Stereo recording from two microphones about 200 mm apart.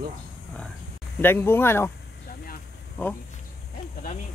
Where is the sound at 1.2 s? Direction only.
10° left (ahead or behind).